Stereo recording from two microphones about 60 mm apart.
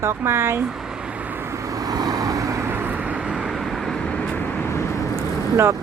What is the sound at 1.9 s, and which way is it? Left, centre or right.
Vehicle, right.